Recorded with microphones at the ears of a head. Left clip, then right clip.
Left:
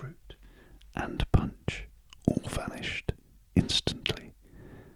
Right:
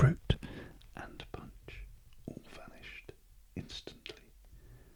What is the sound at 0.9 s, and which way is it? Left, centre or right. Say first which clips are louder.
Whispering: left 14 dB; left.